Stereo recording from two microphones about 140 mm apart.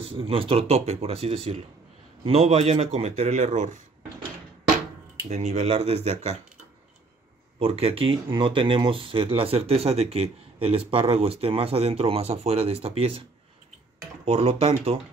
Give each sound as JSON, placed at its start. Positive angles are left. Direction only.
{"t": 0.0, "sound": "speech", "side_deg": -40}
{"t": 5.3, "sound": "speech", "side_deg": -50}
{"t": 7.5, "sound": "speech", "side_deg": -45}
{"t": 14.2, "sound": "speech", "side_deg": -45}